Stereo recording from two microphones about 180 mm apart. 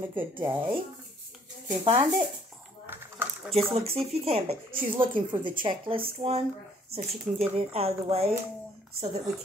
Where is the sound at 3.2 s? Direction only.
10° right (ahead or behind).